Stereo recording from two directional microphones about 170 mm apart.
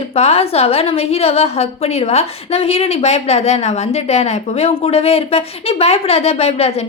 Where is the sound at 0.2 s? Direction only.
35° left (ahead or behind).